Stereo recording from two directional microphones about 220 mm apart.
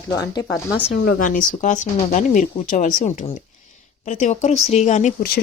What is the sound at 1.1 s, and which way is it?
Speech, 40° left (ahead or behind).